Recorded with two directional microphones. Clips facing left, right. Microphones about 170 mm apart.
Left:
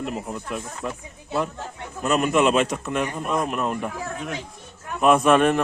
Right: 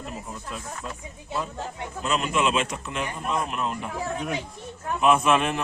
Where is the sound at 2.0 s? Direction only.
50° left (ahead or behind).